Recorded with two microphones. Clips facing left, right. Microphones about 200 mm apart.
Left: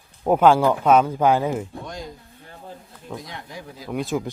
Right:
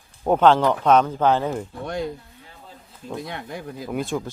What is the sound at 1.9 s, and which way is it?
Speech, 60° right (ahead or behind).